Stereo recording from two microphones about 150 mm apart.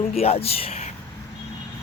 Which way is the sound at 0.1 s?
40° left (ahead or behind).